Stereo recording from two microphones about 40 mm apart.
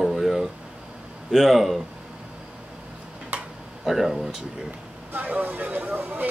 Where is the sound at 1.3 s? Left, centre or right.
Centre.